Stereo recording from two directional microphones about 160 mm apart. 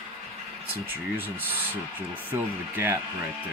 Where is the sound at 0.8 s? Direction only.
15° right (ahead or behind).